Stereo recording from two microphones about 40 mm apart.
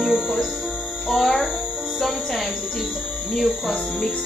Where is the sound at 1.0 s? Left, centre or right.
Centre.